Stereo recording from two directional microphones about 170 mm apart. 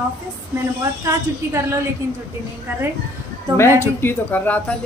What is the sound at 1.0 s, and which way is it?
Speech, 15° right (ahead or behind).